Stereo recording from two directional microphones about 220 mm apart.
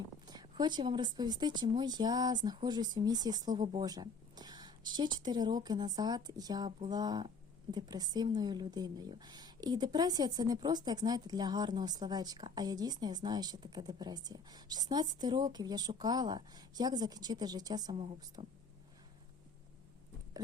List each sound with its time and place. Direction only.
0.3 s a woman's voice: 20° right (ahead or behind)
6.7 s a sound: 30° right (ahead or behind)
6.9 s a woman's voice: 20° right (ahead or behind)